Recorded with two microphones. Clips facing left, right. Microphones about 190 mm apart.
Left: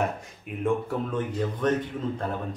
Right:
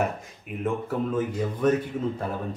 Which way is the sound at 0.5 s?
5° right (ahead or behind).